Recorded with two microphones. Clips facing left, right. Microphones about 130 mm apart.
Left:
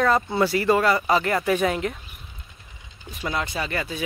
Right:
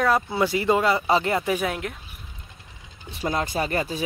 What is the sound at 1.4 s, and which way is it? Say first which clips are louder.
Speech: left 3 dB; 5° right (ahead or behind).